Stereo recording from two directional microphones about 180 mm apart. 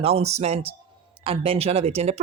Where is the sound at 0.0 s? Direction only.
35° right (ahead or behind).